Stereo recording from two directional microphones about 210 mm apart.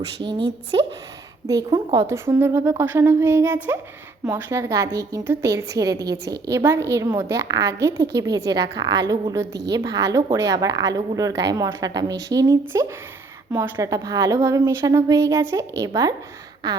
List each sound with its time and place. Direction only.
0.2 s a woman's voice: 25° right (ahead or behind)